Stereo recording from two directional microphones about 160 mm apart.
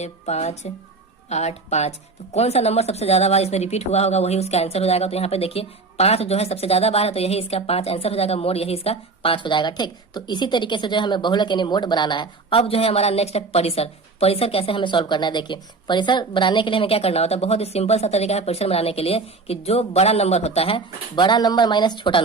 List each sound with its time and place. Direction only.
0.0 s a woman's voice: 45° left (ahead or behind)